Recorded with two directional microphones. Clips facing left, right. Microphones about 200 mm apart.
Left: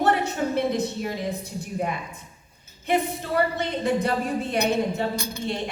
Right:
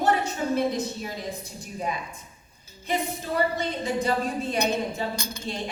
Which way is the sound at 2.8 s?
60° left (ahead or behind).